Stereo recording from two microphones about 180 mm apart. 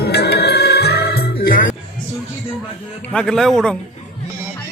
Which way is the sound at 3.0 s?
5° left (ahead or behind).